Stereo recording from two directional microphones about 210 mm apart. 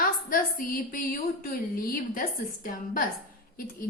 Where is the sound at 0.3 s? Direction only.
45° left (ahead or behind).